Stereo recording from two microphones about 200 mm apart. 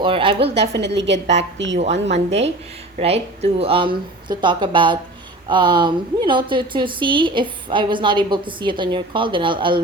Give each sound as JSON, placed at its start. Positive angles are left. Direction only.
{"t": 0.0, "sound": "a woman's voice", "side_deg": -25}
{"t": 0.6, "sound": "a woman's voice", "side_deg": -60}
{"t": 1.8, "sound": "a woman's voice", "side_deg": -35}